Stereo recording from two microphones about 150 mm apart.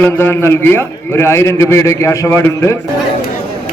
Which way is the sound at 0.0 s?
15° left (ahead or behind).